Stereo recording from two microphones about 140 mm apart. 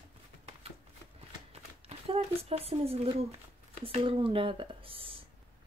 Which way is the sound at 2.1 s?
45° right (ahead or behind).